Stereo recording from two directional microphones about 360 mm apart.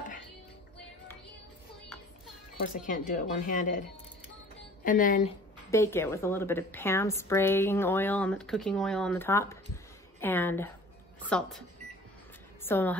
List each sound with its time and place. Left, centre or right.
2.6 s speech: left
4.8 s speech: left
5.7 s a woman's voice: centre
12.6 s a woman's voice: centre